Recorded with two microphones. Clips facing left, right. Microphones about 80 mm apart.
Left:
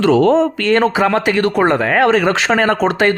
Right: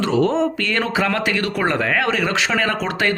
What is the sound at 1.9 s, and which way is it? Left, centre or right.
Speech, left.